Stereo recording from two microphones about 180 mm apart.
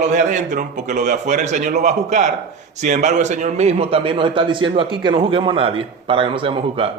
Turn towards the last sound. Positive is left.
turn(degrees=-30)  # may be behind; listen again after turning